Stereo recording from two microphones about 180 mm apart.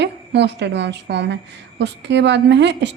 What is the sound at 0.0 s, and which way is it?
A woman's voice, 70° right (ahead or behind).